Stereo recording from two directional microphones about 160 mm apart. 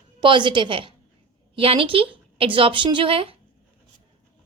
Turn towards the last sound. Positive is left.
turn(degrees=-35)  # may be behind; listen again after turning